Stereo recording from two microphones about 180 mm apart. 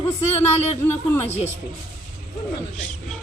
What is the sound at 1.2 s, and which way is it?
Speech, 35° left (ahead or behind).